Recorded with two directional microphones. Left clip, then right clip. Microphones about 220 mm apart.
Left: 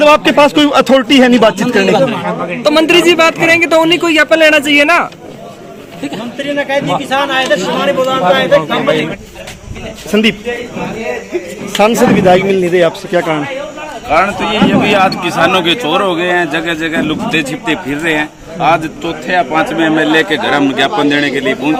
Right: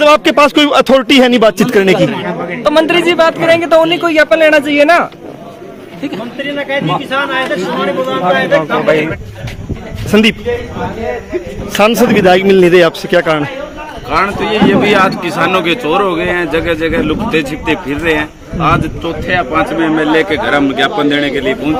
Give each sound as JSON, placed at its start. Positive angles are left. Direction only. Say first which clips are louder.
{"t": 0.0, "sound": "speech", "louder": "even", "side_deg": -45}
{"t": 2.6, "sound": "a man's voice", "louder": "left 1 dB", "side_deg": 10}
{"t": 6.4, "sound": "a man's voice", "louder": "left 2 dB", "side_deg": 10}
{"t": 10.1, "sound": "a man's voice", "louder": "right 2 dB", "side_deg": -25}
{"t": 11.8, "sound": "a man's voice", "louder": "even", "side_deg": -40}
{"t": 14.1, "sound": "speech", "louder": "left 1 dB", "side_deg": 5}